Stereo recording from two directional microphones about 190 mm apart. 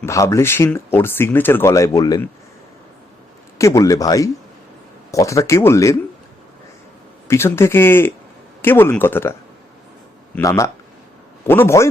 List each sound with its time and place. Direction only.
0.0 s speech: 15° left (ahead or behind)
3.6 s speech: 15° left (ahead or behind)
7.3 s speech: 15° left (ahead or behind)
10.3 s speech: 15° left (ahead or behind)